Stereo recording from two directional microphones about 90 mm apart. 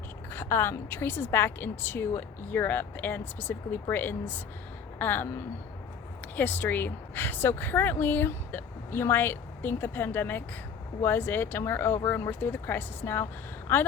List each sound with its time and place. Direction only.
0.3 s speech: 25° left (ahead or behind)